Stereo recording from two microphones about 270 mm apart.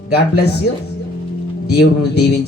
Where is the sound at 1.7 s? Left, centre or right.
Left.